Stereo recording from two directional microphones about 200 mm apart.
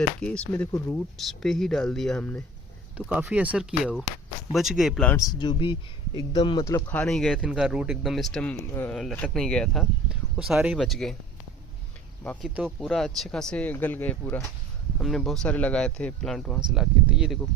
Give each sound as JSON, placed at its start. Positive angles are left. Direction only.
{"t": 0.2, "sound": "speech", "side_deg": 5}
{"t": 3.1, "sound": "speech", "side_deg": -10}
{"t": 5.1, "sound": "speech", "side_deg": 20}
{"t": 12.2, "sound": "speech", "side_deg": 5}